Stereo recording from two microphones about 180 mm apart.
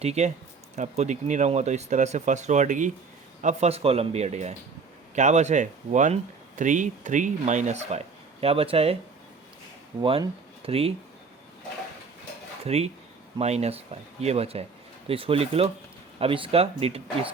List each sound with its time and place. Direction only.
0.0 s speech: 35° right (ahead or behind)
10.0 s speech: 30° right (ahead or behind)
12.6 s speech: 35° right (ahead or behind)